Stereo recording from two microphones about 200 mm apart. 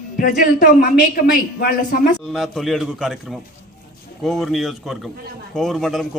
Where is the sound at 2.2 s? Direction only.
Centre (ahead or behind).